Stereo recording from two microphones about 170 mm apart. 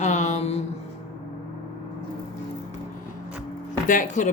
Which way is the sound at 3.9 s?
50° left (ahead or behind).